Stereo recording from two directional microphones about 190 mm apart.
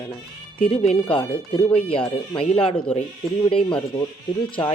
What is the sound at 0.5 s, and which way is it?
Speech, 30° left (ahead or behind).